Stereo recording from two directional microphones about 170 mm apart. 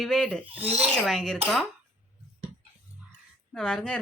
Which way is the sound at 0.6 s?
35° right (ahead or behind).